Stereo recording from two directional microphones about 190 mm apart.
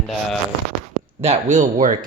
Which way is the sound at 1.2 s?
35° right (ahead or behind).